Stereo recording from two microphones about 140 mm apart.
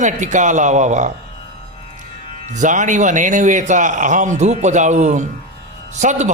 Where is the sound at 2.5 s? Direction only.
60° right (ahead or behind).